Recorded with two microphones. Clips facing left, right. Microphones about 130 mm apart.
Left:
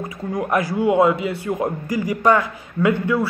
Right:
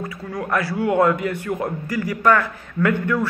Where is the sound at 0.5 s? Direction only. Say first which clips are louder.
Left 2 dB; 20° left (ahead or behind).